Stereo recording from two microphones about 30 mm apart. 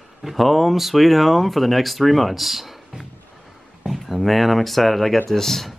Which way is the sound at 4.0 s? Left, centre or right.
Centre.